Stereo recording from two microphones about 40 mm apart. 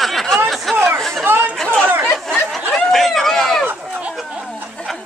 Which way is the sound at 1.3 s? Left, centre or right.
Right.